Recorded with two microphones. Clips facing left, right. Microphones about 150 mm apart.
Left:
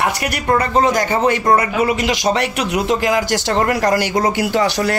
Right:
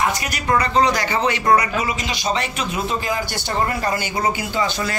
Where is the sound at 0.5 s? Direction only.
50° left (ahead or behind).